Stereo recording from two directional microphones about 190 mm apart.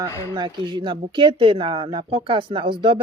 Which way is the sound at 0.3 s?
25° right (ahead or behind).